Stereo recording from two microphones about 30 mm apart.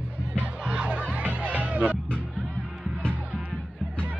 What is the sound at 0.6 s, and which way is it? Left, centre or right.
Music, right.